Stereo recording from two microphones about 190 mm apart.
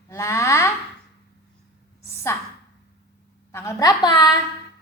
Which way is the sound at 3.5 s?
15° left (ahead or behind).